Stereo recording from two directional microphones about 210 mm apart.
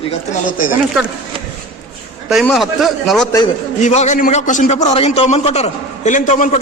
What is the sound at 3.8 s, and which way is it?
A man's voice, 35° left (ahead or behind).